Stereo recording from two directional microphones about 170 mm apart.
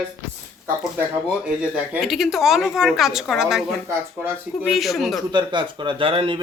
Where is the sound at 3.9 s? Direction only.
15° right (ahead or behind).